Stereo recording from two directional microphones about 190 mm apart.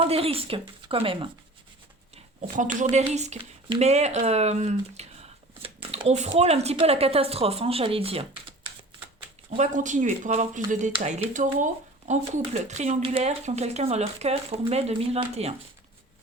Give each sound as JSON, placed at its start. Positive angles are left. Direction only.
{"t": 0.0, "sound": "speech", "side_deg": -30}
{"t": 2.9, "sound": "speech", "side_deg": -35}
{"t": 9.6, "sound": "speech", "side_deg": -40}